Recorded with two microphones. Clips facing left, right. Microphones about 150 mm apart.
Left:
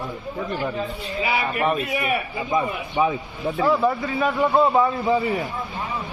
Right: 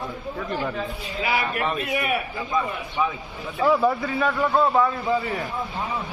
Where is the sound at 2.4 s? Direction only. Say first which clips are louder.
Left 4 dB; 25° left (ahead or behind).